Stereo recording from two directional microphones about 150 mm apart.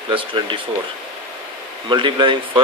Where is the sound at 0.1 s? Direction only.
35° right (ahead or behind).